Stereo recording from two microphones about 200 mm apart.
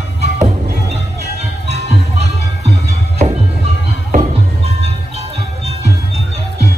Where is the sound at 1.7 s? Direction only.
30° right (ahead or behind).